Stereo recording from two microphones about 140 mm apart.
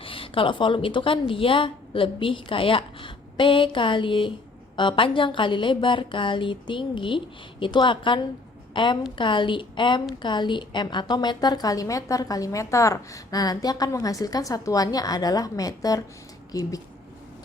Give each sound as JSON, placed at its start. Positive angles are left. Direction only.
{"t": 0.0, "sound": "a woman's voice", "side_deg": 40}